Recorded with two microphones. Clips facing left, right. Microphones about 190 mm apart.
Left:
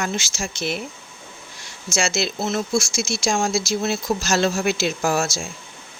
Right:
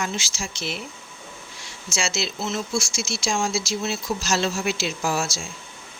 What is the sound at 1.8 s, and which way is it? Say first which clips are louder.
Speech: left 5 dB; 45° left (ahead or behind).